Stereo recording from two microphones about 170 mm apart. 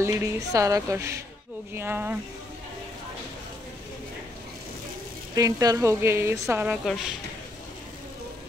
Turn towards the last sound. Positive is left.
turn(degrees=-5)  # may be behind; listen again after turning